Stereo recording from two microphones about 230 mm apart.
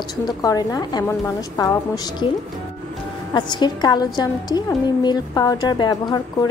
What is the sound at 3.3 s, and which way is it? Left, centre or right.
A woman's voice, centre.